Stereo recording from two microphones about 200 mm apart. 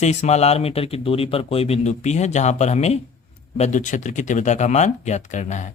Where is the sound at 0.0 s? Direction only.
35° left (ahead or behind).